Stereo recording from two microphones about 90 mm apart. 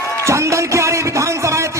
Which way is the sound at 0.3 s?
35° right (ahead or behind).